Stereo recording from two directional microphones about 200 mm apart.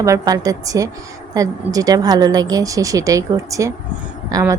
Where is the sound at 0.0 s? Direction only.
15° right (ahead or behind).